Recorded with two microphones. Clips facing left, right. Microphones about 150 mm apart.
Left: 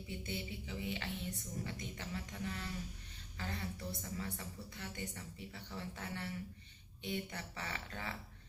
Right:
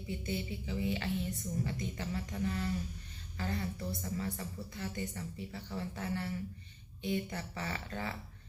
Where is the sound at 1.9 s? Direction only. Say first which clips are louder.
Right 6 dB; 35° right (ahead or behind).